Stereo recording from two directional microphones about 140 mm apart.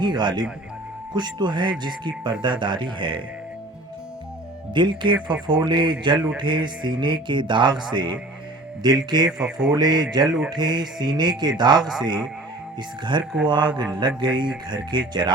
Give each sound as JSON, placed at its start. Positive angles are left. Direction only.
{"t": 0.0, "sound": "speech", "side_deg": -30}
{"t": 4.7, "sound": "speech", "side_deg": -35}
{"t": 9.4, "sound": "speech", "side_deg": -5}
{"t": 9.7, "sound": "speech", "side_deg": -30}
{"t": 10.2, "sound": "speech", "side_deg": -5}
{"t": 10.5, "sound": "speech", "side_deg": -30}
{"t": 11.8, "sound": "speech", "side_deg": -5}
{"t": 13.1, "sound": "speech", "side_deg": -30}